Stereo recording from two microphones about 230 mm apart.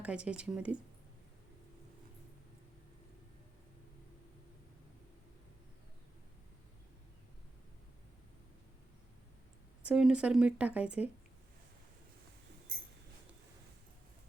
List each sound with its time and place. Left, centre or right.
0.0 s speech: centre
9.8 s speech: centre